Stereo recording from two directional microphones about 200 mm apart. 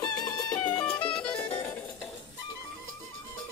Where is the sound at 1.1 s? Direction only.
5° left (ahead or behind).